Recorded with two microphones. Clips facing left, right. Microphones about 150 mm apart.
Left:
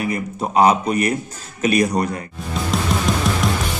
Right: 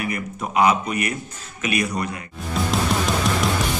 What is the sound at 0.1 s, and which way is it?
Speech, 35° left (ahead or behind).